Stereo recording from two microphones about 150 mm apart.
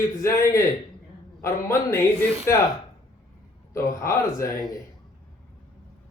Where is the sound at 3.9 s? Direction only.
20° left (ahead or behind).